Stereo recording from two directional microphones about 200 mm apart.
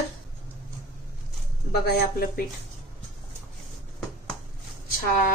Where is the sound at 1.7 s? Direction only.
50° left (ahead or behind).